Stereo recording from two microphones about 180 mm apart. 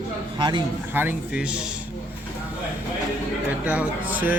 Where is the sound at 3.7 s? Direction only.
10° right (ahead or behind).